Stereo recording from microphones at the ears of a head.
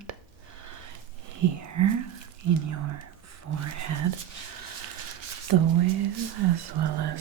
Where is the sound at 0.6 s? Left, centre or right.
Right.